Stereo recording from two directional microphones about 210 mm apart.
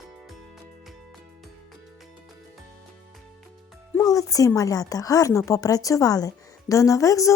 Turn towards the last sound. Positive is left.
turn(degrees=15)  # may be behind; listen again after turning